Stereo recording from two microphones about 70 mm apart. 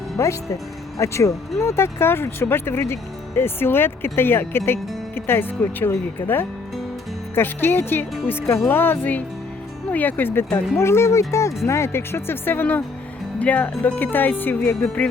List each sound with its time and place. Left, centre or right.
0.2 s speech: left